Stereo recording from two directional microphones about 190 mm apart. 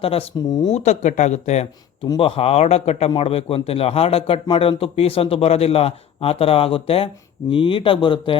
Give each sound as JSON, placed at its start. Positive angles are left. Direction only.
{"t": 0.0, "sound": "speech", "side_deg": 30}
{"t": 0.7, "sound": "a man's voice", "side_deg": 35}
{"t": 2.0, "sound": "a man's voice", "side_deg": 25}